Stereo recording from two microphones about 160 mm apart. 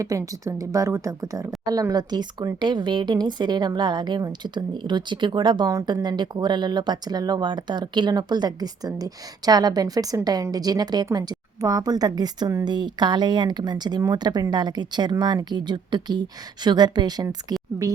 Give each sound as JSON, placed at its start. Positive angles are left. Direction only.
{"t": 0.0, "sound": "speech", "side_deg": -20}